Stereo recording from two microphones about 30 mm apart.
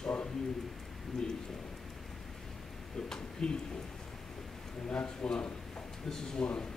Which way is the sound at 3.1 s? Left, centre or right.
Left.